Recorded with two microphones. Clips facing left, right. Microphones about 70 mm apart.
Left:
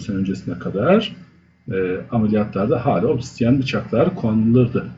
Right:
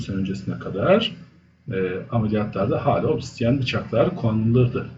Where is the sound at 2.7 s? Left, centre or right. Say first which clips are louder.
Left 3 dB; left.